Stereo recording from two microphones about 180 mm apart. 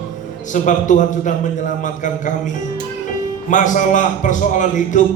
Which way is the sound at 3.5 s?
45° left (ahead or behind).